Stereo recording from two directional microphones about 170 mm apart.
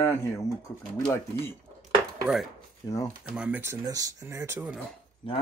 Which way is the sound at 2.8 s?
20° left (ahead or behind).